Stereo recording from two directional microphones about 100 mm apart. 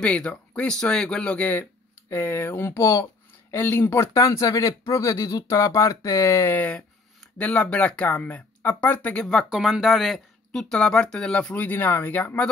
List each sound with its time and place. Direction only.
0.0 s speech: 10° left (ahead or behind)
9.2 s speech: centre (ahead or behind)
11.5 s speech: 20° left (ahead or behind)